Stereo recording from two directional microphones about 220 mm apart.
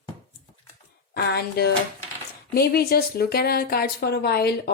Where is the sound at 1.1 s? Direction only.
45° left (ahead or behind).